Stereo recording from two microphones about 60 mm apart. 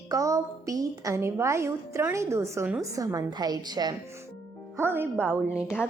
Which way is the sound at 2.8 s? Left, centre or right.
Right.